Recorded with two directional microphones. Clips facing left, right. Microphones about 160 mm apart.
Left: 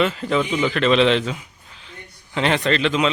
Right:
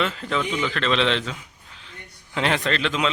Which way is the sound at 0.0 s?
10° left (ahead or behind).